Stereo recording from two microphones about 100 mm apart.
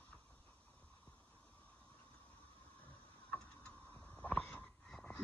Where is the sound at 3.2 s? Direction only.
10° left (ahead or behind).